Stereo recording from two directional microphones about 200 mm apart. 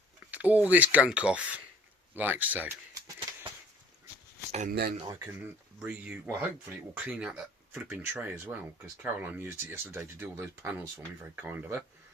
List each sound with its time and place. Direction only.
0.3 s speech: 10° right (ahead or behind)
4.7 s speech: 50° right (ahead or behind)
5.0 s speech: 10° right (ahead or behind)